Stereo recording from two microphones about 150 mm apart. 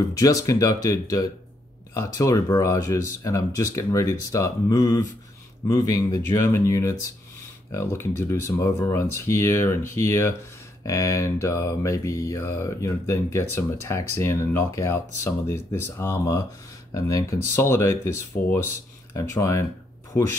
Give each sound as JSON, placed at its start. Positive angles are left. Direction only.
{"t": 0.1, "sound": "speech", "side_deg": 25}
{"t": 19.1, "sound": "speech", "side_deg": 20}